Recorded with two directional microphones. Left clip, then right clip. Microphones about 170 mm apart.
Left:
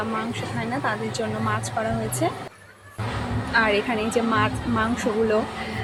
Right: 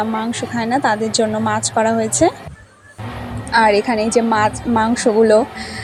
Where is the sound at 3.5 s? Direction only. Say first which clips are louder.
Right 8 dB; 30° right (ahead or behind).